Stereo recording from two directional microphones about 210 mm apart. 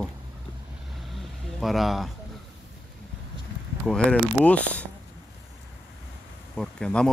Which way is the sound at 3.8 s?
5° left (ahead or behind).